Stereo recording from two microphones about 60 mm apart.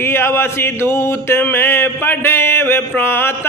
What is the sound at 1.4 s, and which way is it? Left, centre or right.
Mantra, left.